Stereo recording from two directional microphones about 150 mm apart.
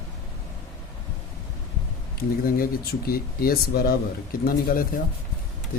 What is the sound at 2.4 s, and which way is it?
Speech, 80° left.